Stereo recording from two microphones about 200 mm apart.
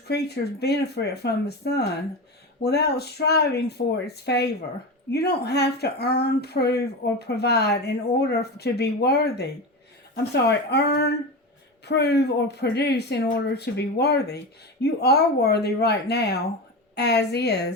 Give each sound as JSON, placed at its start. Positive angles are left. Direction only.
{"t": 0.1, "sound": "speech", "side_deg": 55}